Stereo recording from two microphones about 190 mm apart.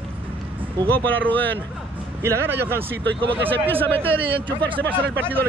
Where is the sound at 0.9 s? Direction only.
10° left (ahead or behind).